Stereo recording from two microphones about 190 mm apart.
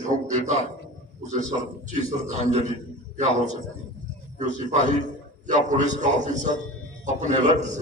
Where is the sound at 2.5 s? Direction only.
35° right (ahead or behind).